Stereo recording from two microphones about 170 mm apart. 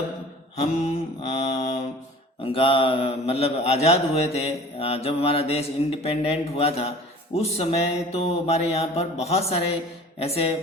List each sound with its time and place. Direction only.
0.5 s speech: 40° left (ahead or behind)